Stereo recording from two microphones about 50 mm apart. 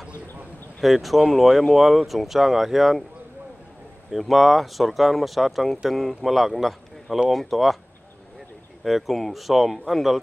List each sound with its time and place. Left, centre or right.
0.7 s speech: centre
4.1 s speech: centre
8.8 s speech: centre